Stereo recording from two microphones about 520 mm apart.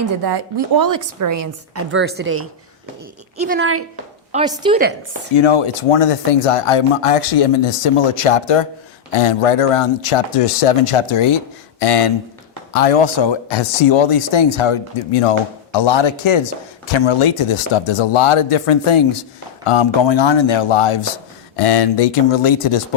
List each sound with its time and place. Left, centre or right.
0.2 s a woman's voice: right
4.3 s a woman's voice: centre
5.4 s speech: left
11.8 s speech: left
15.7 s speech: left
21.5 s speech: left